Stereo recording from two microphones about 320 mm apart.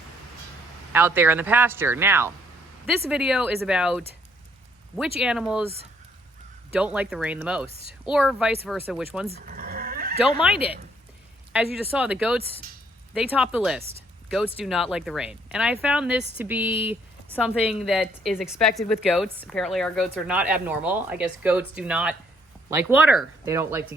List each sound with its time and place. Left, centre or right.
0.9 s speech: centre
5.2 s speech: centre
6.7 s speech: centre
9.3 s neigh: right
11.5 s speech: centre